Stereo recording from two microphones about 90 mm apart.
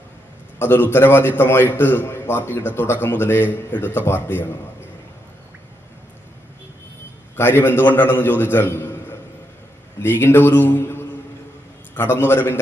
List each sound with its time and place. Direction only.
0.6 s a man's voice: 25° left (ahead or behind)
7.3 s a man's voice: 25° left (ahead or behind)